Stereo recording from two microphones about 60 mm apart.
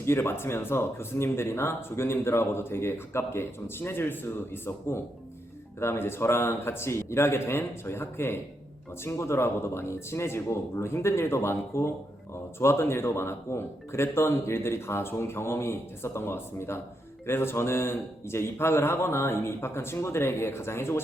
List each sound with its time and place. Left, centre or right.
0.0 s speech: left